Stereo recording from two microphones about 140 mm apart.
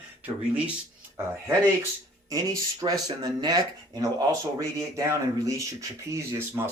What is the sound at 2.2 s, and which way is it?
Speech, 25° right (ahead or behind).